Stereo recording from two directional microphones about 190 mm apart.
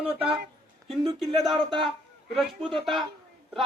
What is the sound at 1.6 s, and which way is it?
Speech, 25° right (ahead or behind).